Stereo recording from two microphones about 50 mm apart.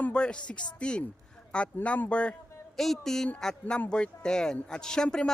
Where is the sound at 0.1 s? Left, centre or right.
Centre.